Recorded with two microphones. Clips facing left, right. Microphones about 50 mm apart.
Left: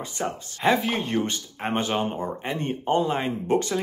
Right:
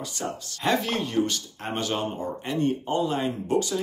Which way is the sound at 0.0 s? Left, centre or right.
Left.